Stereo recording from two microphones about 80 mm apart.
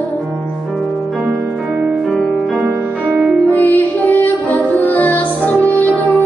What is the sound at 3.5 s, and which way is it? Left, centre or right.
Music, left.